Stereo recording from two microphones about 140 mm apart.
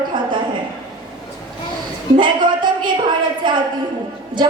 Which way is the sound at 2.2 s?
35° right (ahead or behind).